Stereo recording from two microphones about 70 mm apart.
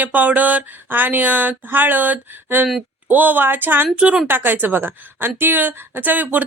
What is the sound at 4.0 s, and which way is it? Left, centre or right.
Speech, centre.